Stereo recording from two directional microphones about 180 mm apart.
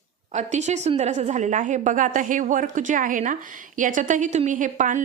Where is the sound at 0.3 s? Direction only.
40° right (ahead or behind).